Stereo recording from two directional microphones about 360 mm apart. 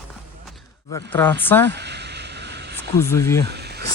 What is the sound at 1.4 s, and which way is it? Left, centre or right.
Speech, centre.